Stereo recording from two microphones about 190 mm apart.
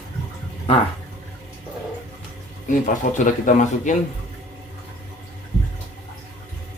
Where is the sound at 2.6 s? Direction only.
45° left (ahead or behind).